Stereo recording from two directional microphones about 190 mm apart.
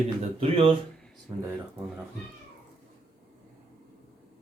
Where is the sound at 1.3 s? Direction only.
15° right (ahead or behind).